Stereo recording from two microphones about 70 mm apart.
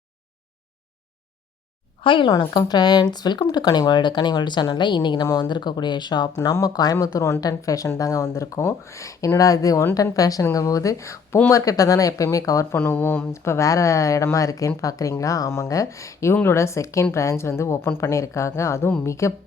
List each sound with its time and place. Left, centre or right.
2.3 s speech: left
12.7 s a woman's voice: left
16.3 s a woman's voice: left